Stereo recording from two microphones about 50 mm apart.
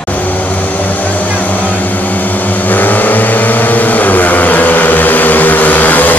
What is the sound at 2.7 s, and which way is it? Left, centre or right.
Vehicle, left.